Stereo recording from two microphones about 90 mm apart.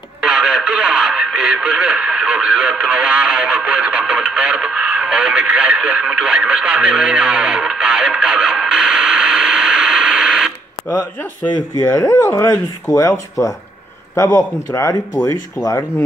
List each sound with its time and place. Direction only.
0.2 s speech: 10° right (ahead or behind)
11.8 s speech: 30° left (ahead or behind)